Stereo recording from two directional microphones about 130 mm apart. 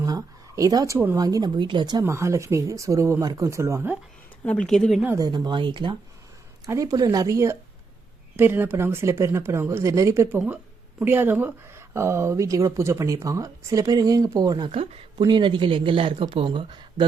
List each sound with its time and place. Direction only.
0.0 s a sound: 25° right (ahead or behind)
0.9 s speech: 20° right (ahead or behind)
2.0 s speech: 20° right (ahead or behind)
4.4 s speech: 5° left (ahead or behind)
5.1 s speech: 30° right (ahead or behind)
6.7 s speech: 25° right (ahead or behind)